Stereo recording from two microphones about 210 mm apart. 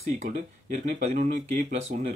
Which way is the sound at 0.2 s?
35° right (ahead or behind).